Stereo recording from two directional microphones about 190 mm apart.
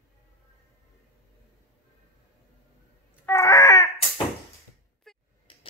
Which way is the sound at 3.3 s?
15° left (ahead or behind).